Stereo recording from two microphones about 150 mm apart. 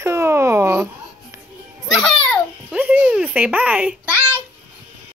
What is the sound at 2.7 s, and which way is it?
Speech, 10° right (ahead or behind).